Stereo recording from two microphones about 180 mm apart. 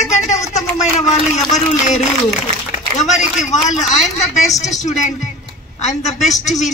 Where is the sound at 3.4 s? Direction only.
40° left (ahead or behind).